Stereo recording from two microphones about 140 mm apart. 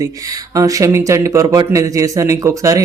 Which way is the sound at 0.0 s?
25° right (ahead or behind).